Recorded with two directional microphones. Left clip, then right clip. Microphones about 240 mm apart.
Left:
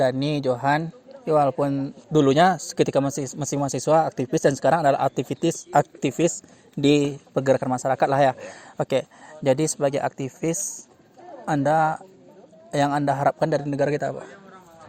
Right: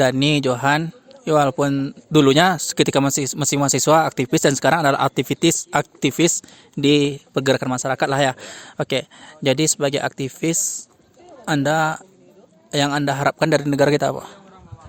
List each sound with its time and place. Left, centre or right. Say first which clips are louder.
0.0 s a man's voice: right 5 dB; right
6.7 s a man's voice: right 3 dB; right
7.3 s a man's voice: right 1 dB; right
14.0 s a man's voice: right 6 dB; right